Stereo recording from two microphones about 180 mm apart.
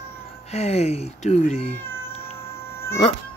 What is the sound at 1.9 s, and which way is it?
Cat, 15° left (ahead or behind).